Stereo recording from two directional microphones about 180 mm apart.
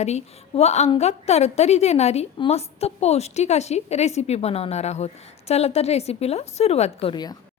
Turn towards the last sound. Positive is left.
turn(degrees=25)  # may be behind; listen again after turning